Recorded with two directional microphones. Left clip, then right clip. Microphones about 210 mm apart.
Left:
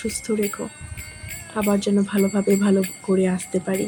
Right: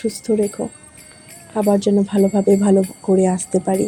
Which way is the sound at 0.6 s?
30° left (ahead or behind).